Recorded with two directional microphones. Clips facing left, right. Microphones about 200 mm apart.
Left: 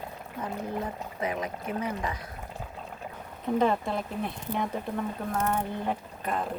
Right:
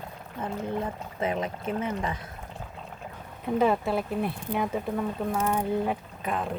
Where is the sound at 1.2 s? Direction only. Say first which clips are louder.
Right 3 dB; 25° right (ahead or behind).